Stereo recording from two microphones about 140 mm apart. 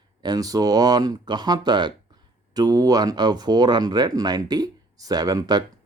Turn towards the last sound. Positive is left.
turn(degrees=-30)  # may be behind; listen again after turning